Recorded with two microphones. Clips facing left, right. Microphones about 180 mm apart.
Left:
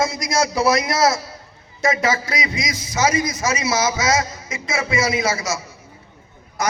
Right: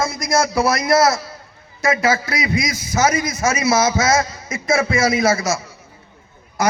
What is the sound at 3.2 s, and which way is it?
Speech, 25° right (ahead or behind).